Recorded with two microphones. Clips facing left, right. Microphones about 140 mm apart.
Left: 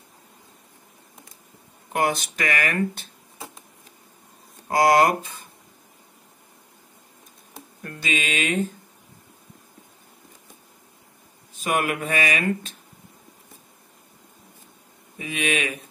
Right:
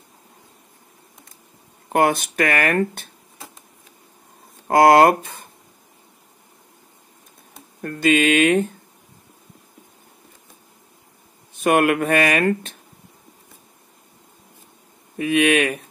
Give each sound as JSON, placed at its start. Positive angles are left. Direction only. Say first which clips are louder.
{"t": 1.9, "sound": "speech", "louder": "right 6 dB", "side_deg": -55}
{"t": 4.6, "sound": "speech", "louder": "right 5 dB", "side_deg": -55}
{"t": 7.8, "sound": "speech", "louder": "right 11 dB", "side_deg": -55}
{"t": 11.6, "sound": "speech", "louder": "right 8 dB", "side_deg": -60}
{"t": 15.1, "sound": "speech", "louder": "right 9 dB", "side_deg": -60}